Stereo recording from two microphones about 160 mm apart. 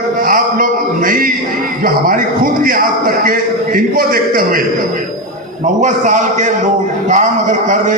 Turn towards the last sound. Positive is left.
turn(degrees=-50)  # may be behind; listen again after turning